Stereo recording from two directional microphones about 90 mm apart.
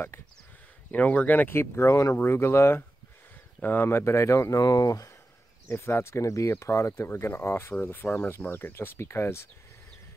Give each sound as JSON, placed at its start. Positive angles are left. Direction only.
{"t": 0.9, "sound": "speech", "side_deg": 15}
{"t": 5.7, "sound": "speech", "side_deg": 25}